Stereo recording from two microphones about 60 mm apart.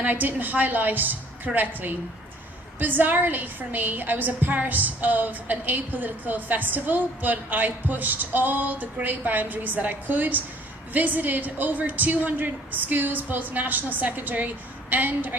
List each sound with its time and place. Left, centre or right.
0.0 s a woman's voice: right